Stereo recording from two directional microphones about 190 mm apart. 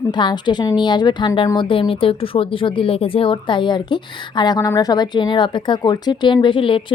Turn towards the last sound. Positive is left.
turn(degrees=25)  # may be behind; listen again after turning